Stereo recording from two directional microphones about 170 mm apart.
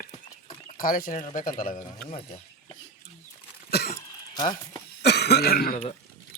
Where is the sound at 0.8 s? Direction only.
55° left (ahead or behind).